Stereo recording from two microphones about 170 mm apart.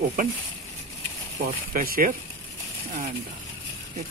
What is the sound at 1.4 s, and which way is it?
Speech, 60° right (ahead or behind).